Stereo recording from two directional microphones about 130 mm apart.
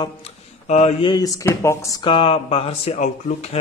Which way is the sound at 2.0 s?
45° left (ahead or behind).